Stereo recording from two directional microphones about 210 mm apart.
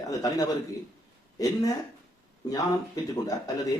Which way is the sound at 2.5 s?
15° left (ahead or behind).